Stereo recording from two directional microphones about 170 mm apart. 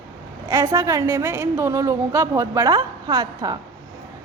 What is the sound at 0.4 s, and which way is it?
A woman's voice, 20° right (ahead or behind).